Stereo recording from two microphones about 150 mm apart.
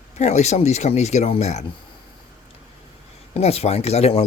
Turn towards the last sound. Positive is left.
turn(degrees=45)  # may be behind; listen again after turning